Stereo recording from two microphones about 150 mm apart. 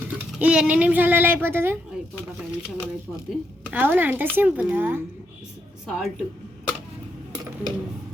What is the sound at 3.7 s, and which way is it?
Speech, 10° right (ahead or behind).